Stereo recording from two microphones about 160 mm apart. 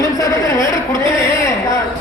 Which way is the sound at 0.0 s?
20° left (ahead or behind).